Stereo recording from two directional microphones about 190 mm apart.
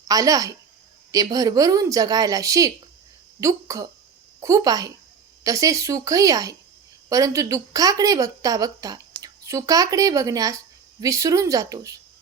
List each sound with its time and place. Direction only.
0.1 s a woman's voice: 20° right (ahead or behind)